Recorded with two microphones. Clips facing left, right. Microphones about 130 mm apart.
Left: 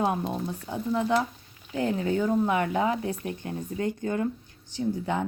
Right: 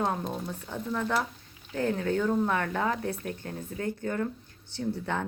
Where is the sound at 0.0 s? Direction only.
10° left (ahead or behind).